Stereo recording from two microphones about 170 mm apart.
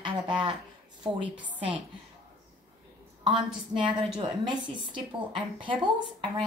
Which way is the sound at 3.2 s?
30° right (ahead or behind).